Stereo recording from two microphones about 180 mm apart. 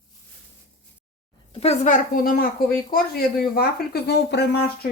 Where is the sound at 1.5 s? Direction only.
40° left (ahead or behind).